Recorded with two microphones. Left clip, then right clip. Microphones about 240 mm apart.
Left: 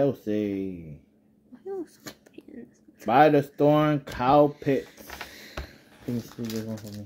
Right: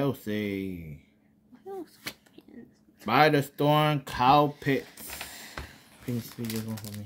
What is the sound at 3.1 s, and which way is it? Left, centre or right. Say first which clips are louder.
Speech: left 3 dB; right.